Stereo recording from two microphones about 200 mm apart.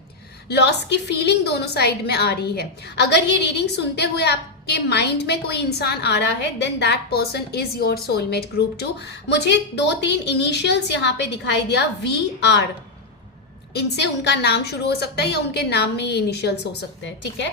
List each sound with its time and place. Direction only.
0.4 s a woman's voice: 55° left (ahead or behind)
13.7 s a woman's voice: 55° left (ahead or behind)